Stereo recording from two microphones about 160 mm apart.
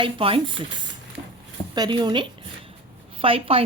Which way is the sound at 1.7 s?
25° right (ahead or behind).